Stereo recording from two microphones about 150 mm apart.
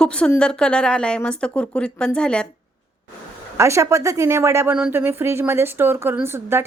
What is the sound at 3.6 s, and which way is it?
Speech, 20° right (ahead or behind).